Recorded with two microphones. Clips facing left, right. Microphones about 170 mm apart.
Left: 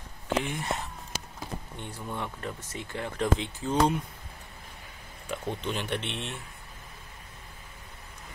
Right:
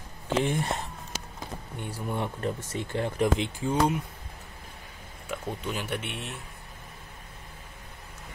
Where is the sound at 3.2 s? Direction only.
10° right (ahead or behind).